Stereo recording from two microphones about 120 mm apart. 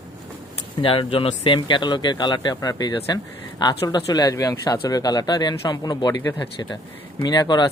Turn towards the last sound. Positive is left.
turn(degrees=35)  # may be behind; listen again after turning